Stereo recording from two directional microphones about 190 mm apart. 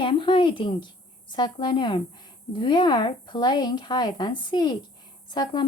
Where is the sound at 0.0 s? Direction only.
25° left (ahead or behind).